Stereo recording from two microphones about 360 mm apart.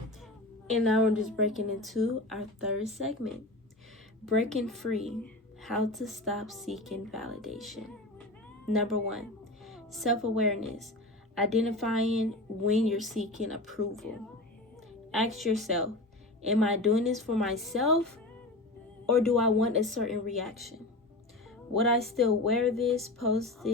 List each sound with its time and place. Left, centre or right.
0.7 s a woman's voice: centre
4.3 s a woman's voice: centre
15.1 s a woman's voice: centre
21.8 s a woman's voice: centre